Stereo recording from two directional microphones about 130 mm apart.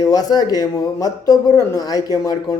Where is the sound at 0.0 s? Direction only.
30° left (ahead or behind).